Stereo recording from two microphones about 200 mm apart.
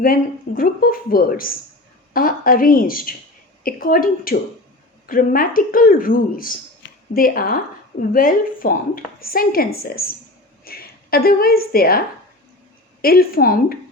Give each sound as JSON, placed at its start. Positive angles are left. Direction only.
{"t": 0.0, "sound": "a woman's voice", "side_deg": 45}